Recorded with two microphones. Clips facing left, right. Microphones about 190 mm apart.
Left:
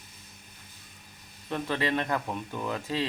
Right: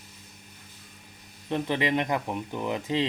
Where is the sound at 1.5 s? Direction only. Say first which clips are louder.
Right 3 dB; 20° right (ahead or behind).